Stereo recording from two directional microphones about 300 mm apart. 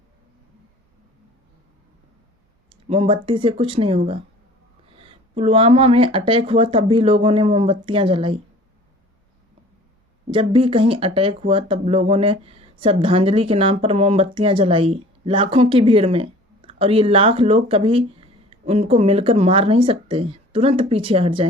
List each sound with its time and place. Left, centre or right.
2.6 s speech: centre
10.3 s speech: centre